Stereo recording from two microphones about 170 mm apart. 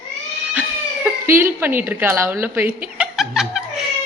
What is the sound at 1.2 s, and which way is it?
A woman's voice, 15° right (ahead or behind).